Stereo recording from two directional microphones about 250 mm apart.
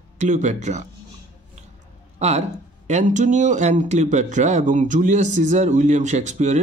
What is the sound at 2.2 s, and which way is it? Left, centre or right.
Speech, right.